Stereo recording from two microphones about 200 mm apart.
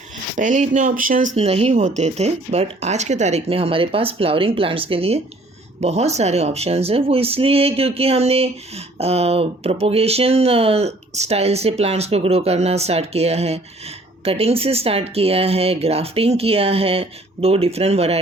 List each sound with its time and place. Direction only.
0.3 s speech: 40° right (ahead or behind)
1.4 s speech: 30° right (ahead or behind)